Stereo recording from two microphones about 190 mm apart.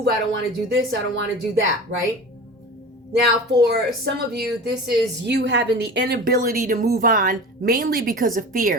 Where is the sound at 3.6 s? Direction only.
60° right (ahead or behind).